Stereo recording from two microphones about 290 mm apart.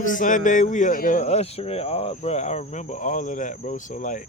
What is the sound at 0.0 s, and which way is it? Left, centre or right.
Speech, left.